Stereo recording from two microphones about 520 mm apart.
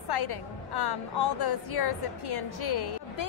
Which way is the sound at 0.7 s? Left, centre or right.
Left.